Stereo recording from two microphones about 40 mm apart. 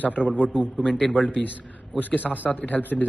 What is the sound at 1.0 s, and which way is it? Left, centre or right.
Speech, left.